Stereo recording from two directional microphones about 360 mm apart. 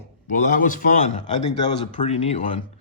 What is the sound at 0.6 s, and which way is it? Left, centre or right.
Speech, left.